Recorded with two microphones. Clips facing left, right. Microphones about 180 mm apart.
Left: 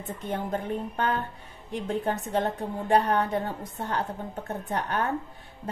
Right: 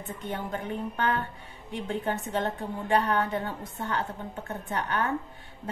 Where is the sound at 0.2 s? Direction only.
40° left (ahead or behind).